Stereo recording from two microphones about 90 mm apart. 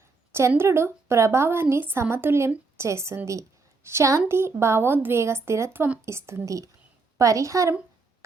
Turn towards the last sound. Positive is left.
turn(degrees=-35)  # may be behind; listen again after turning